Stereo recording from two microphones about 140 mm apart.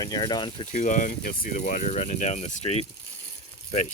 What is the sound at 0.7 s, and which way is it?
Speech, 60° left (ahead or behind).